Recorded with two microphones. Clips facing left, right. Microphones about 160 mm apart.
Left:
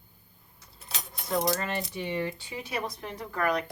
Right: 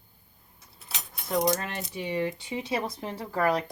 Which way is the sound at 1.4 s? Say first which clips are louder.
Right 2 dB; 20° right (ahead or behind).